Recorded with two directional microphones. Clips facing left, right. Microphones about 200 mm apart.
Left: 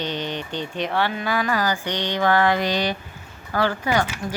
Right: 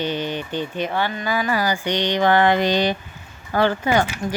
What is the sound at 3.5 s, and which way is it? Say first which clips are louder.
Speech: right 3 dB; 25° right (ahead or behind).